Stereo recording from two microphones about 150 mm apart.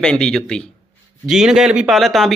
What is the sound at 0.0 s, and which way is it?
Speech, 5° left (ahead or behind).